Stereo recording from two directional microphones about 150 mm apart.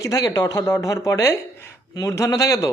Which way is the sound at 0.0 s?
25° left (ahead or behind).